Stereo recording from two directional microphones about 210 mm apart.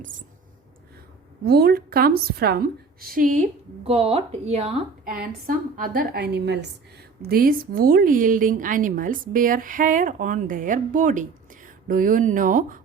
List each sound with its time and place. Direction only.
1.5 s a woman's voice: 45° right (ahead or behind); by 4.7 s 30° right (ahead or behind)
5.5 s a woman's voice: 40° right (ahead or behind)